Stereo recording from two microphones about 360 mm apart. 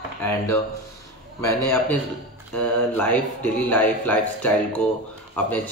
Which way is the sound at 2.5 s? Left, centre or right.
Centre.